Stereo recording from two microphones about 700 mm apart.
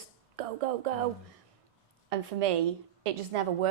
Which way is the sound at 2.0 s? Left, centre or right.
Right.